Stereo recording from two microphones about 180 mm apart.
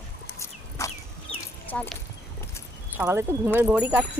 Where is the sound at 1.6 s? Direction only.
10° left (ahead or behind).